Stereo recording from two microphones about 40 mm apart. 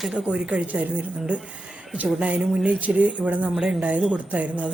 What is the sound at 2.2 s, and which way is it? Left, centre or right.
Speech, right.